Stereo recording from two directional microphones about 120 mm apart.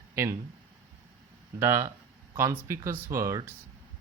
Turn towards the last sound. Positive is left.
turn(degrees=-25)  # may be behind; listen again after turning